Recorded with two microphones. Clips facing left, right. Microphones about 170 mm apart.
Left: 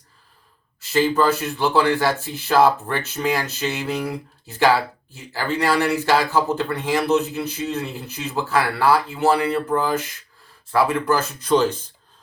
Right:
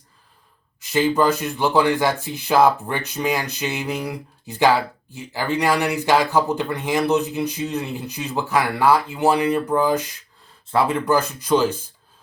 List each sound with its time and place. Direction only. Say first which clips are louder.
0.8 s speech: even; 15° right (ahead or behind)